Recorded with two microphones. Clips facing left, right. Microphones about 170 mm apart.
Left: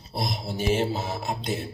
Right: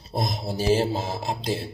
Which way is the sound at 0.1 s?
40° right (ahead or behind).